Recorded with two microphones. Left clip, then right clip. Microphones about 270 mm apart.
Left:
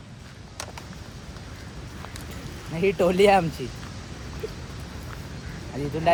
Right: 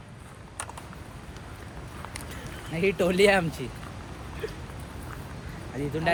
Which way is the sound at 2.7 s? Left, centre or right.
Centre.